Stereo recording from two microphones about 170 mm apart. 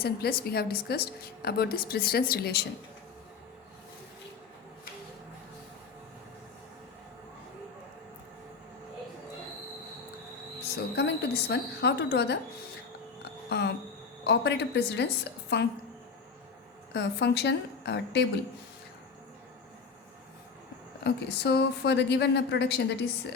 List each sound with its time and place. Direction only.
0.0 s a woman's voice: 65° left (ahead or behind)
10.9 s a woman's voice: 85° left
13.5 s a woman's voice: 85° left
16.9 s a woman's voice: 90° left
21.0 s a woman's voice: 80° left